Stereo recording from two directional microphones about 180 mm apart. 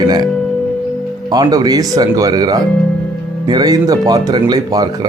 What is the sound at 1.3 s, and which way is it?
Speech, 20° right (ahead or behind).